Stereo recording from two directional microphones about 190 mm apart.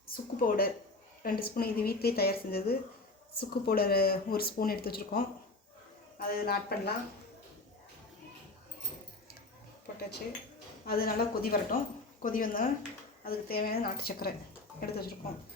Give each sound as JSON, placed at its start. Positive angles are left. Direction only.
{"t": 0.1, "sound": "speech", "side_deg": 50}
{"t": 10.8, "sound": "speech", "side_deg": 50}